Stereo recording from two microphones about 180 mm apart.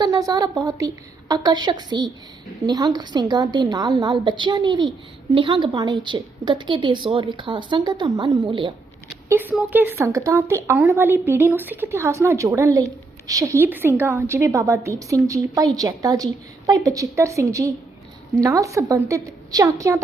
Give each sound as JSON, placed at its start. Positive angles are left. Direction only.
{"t": 0.0, "sound": "a woman's voice", "side_deg": -20}
{"t": 9.3, "sound": "a woman's voice", "side_deg": -10}